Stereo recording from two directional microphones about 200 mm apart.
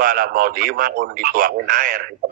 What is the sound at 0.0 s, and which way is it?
Speech, 45° right (ahead or behind).